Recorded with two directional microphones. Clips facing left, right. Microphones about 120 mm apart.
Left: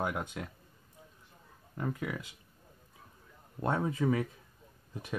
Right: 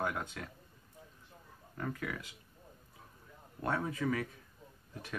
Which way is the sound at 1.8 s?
20° left (ahead or behind).